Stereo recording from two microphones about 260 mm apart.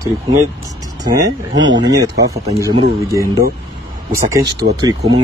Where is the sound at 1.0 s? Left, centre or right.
Centre.